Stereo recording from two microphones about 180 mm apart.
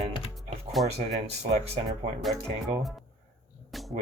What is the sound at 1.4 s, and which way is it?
Speech, 35° right (ahead or behind).